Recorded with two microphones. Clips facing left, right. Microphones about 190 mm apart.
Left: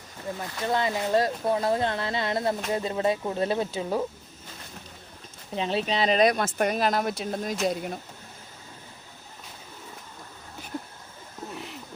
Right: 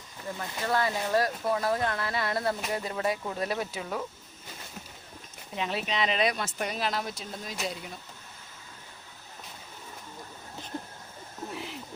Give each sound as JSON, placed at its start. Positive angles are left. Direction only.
{"t": 0.6, "sound": "speech", "side_deg": 20}
{"t": 5.5, "sound": "speech", "side_deg": 30}
{"t": 11.5, "sound": "a sound", "side_deg": 0}